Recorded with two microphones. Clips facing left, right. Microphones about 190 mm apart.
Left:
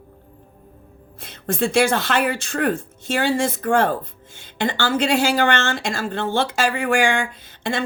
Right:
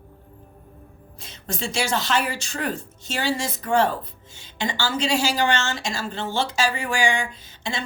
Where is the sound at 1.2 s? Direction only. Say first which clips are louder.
Left 8 dB; 55° left (ahead or behind).